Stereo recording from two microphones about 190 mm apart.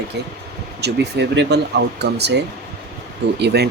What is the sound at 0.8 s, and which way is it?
Speech, 60° right (ahead or behind).